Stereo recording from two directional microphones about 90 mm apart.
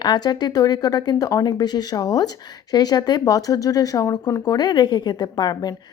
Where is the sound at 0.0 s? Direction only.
50° left (ahead or behind).